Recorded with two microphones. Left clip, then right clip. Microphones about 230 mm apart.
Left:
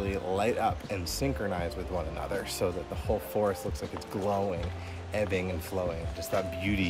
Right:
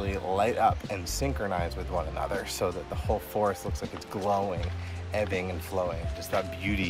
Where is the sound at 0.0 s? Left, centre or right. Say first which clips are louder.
Right 2 dB; centre.